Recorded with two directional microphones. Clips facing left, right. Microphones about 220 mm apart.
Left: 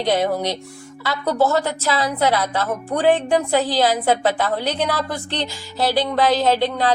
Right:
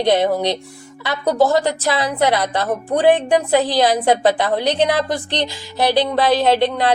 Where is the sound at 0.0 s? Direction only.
15° right (ahead or behind).